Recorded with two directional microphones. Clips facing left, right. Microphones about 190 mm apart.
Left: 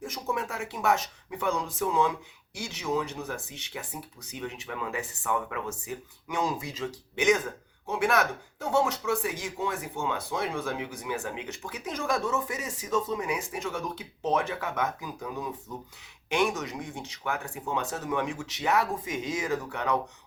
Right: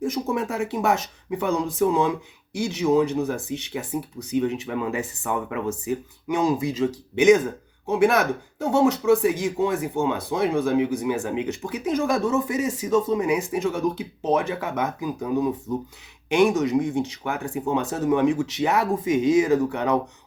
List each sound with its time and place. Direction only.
0.1 s speech: 25° right (ahead or behind)